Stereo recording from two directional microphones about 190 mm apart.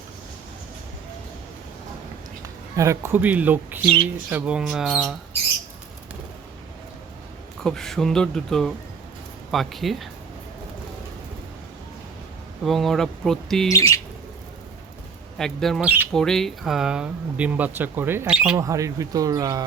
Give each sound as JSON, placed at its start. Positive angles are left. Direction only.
{"t": 2.7, "sound": "speech", "side_deg": -15}
{"t": 7.6, "sound": "speech", "side_deg": 5}
{"t": 12.6, "sound": "speech", "side_deg": 0}
{"t": 13.7, "sound": "bird", "side_deg": 15}
{"t": 15.4, "sound": "speech", "side_deg": 0}
{"t": 18.5, "sound": "speech", "side_deg": -15}